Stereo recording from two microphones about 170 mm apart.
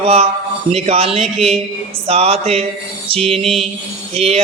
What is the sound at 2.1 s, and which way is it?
Speech, 40° right (ahead or behind).